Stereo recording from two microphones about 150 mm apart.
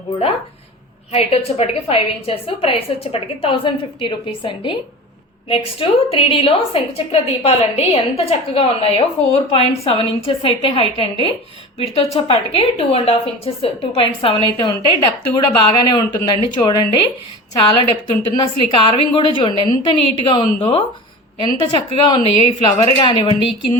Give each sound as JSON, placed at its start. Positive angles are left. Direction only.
{"t": 1.1, "sound": "a woman's voice", "side_deg": 40}
{"t": 18.1, "sound": "a woman's voice", "side_deg": 35}